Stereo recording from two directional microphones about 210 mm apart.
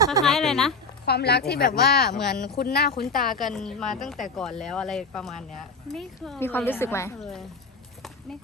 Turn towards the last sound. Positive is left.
turn(degrees=0)  # may be behind; listen again after turning